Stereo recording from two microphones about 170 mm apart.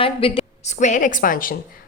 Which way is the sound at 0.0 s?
35° left (ahead or behind).